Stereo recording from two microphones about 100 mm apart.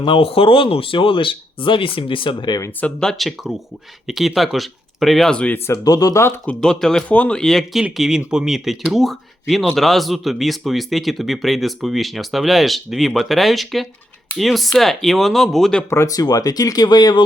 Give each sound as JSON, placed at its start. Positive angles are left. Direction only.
{"t": 0.0, "sound": "speech", "side_deg": 65}
{"t": 2.8, "sound": "speech", "side_deg": 5}
{"t": 5.8, "sound": "speech", "side_deg": 40}
{"t": 6.4, "sound": "speech", "side_deg": 10}
{"t": 15.9, "sound": "speech", "side_deg": 30}